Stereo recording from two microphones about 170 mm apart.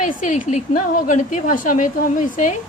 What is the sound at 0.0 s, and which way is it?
A woman's voice, 50° left (ahead or behind).